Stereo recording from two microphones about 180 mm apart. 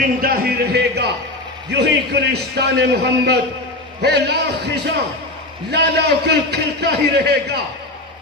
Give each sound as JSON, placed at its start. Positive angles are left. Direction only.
{"t": 0.2, "sound": "a man's voice", "side_deg": -55}